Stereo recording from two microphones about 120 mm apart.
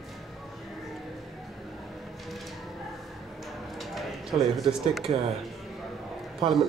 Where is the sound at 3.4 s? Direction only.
Centre (ahead or behind).